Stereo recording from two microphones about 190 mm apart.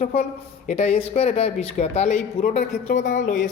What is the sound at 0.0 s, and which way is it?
Speech, 35° left (ahead or behind).